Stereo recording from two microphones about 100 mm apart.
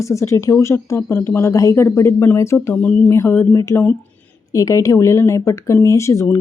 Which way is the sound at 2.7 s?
15° left (ahead or behind).